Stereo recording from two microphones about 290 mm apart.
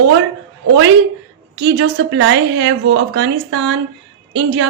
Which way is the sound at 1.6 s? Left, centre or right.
Right.